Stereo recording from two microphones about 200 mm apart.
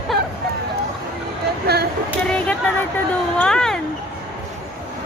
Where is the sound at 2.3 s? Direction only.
5° left (ahead or behind).